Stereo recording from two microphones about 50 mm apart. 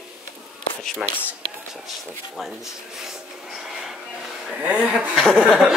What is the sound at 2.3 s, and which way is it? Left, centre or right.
Speech, centre.